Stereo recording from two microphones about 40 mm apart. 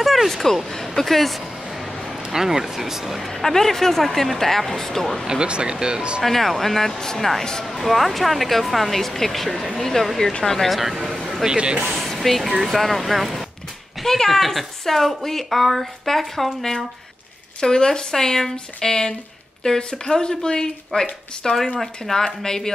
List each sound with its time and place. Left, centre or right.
0.0 s speech: centre
2.3 s speech: centre
3.3 s speech: centre
5.2 s speech: right
6.2 s speech: centre
7.6 s a woman's voice: centre
10.8 s speech: centre
11.4 s speech: right
12.0 s a woman's voice: centre
17.6 s speech: centre